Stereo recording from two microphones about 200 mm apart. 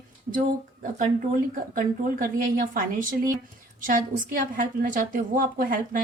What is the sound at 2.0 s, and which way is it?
Speech, 45° right (ahead or behind).